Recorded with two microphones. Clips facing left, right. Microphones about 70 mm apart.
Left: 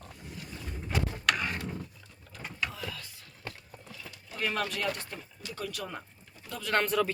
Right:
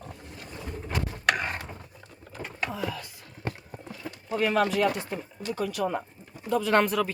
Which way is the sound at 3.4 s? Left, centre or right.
Right.